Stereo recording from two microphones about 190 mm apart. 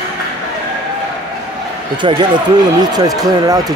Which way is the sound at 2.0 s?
25° right (ahead or behind).